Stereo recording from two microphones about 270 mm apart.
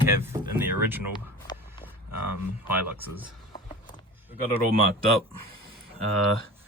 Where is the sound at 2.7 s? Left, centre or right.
Centre.